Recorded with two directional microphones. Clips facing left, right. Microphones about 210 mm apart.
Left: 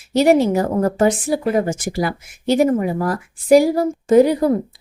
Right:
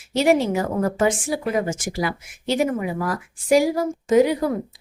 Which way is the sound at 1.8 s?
55° left (ahead or behind).